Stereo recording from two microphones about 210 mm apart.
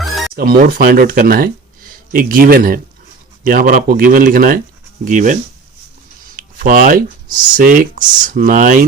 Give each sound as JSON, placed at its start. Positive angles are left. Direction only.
{"t": 0.3, "sound": "speech", "side_deg": -45}